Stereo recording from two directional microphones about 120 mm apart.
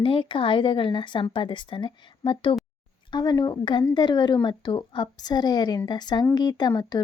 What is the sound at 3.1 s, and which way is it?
Speech, 35° left (ahead or behind).